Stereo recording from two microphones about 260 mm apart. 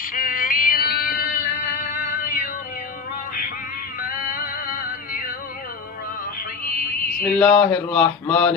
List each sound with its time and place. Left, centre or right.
0.1 s music: left
4.1 s music: left
7.3 s mantra: centre